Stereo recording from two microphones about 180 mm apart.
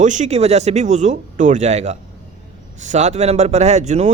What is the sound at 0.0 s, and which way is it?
Speech, 45° right (ahead or behind).